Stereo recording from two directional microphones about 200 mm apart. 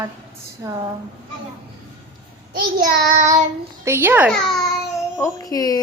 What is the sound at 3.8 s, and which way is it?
Speech, 10° right (ahead or behind).